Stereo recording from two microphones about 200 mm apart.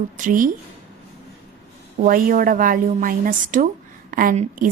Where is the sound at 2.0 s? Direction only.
45° right (ahead or behind).